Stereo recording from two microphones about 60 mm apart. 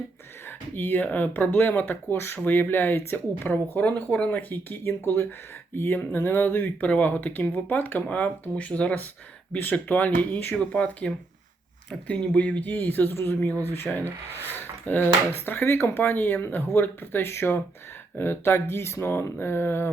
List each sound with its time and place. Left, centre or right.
0.4 s speech: left